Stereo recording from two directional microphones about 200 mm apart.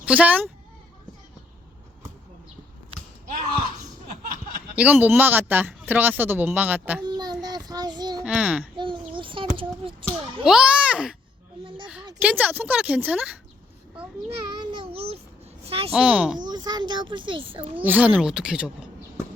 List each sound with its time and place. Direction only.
0.0 s speech: 5° right (ahead or behind)
4.7 s speech: 5° right (ahead or behind)
7.0 s child singing: 20° right (ahead or behind)
8.2 s speech: 5° right (ahead or behind)
8.7 s a child's voice: 25° right (ahead or behind)
10.4 s speech: 5° right (ahead or behind)
12.2 s speech: 10° right (ahead or behind)
14.6 s child singing: 25° right (ahead or behind)
15.6 s a woman's voice: 30° right (ahead or behind)
15.9 s speech: 5° right (ahead or behind)
16.5 s a child's voice: 20° right (ahead or behind)
17.8 s speech: 10° right (ahead or behind)